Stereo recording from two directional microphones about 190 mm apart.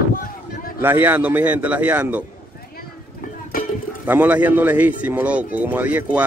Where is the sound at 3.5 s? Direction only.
50° left (ahead or behind).